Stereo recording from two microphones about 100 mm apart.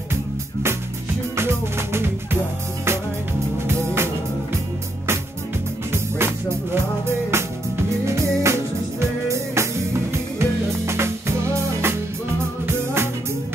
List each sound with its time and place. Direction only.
1.3 s music: 25° right (ahead or behind)
3.6 s music: 25° right (ahead or behind)
5.9 s music: 25° right (ahead or behind)